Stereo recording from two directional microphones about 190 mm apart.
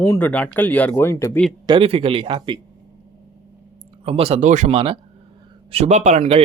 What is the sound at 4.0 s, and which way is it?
Speech, 30° right (ahead or behind).